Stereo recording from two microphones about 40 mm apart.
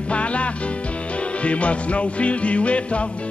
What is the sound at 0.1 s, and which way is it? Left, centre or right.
Music, left.